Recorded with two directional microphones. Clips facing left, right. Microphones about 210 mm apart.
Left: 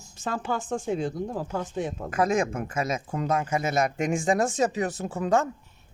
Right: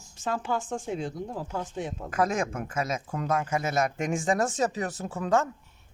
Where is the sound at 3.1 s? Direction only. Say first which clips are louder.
Left 2 dB; 15° left (ahead or behind).